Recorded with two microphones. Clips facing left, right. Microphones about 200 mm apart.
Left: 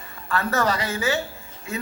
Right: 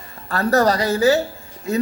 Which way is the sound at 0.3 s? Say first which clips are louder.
Right 6 dB; 40° right (ahead or behind).